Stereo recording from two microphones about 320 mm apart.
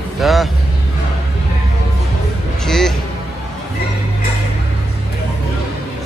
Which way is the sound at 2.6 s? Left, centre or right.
Centre.